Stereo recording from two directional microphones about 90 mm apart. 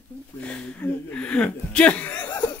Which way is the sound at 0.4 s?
15° left (ahead or behind).